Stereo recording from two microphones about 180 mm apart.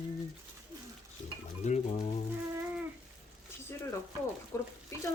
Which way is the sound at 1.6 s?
40° left (ahead or behind).